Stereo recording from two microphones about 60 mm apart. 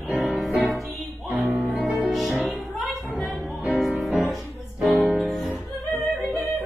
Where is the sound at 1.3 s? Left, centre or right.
Right.